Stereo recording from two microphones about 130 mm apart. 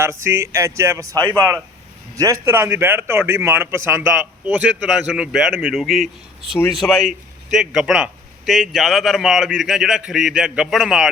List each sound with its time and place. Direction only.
0.0 s a man's voice: 20° right (ahead or behind); by 11.1 s 5° right (ahead or behind)